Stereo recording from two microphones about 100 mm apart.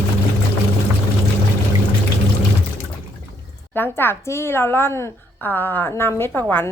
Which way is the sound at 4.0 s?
25° left (ahead or behind).